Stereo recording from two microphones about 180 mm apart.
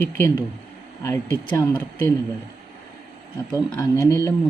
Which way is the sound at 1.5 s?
20° left (ahead or behind).